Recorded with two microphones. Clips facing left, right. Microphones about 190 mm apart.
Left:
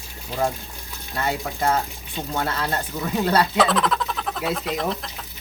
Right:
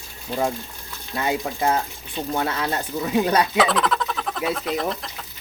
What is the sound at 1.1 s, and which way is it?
Speech, 10° right (ahead or behind).